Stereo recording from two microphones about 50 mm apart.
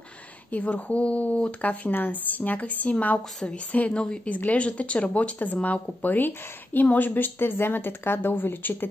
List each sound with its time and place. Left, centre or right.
0.5 s a woman's voice: left